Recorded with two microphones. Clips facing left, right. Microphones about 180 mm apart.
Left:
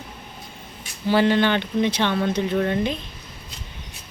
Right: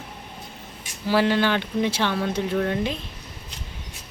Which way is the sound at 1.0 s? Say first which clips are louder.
Left 2 dB; centre (ahead or behind).